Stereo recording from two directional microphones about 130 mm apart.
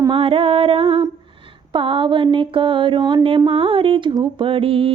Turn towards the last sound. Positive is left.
turn(degrees=-45)  # may be behind; listen again after turning